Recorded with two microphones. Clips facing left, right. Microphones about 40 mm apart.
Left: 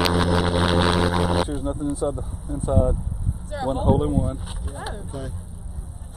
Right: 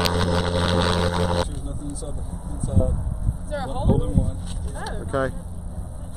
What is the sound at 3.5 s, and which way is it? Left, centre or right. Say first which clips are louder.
Vehicle: left 3 dB; centre.